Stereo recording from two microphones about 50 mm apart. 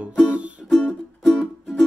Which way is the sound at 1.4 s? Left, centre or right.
Centre.